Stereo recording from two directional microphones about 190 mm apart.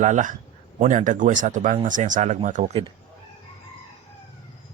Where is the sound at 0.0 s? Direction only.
40° right (ahead or behind).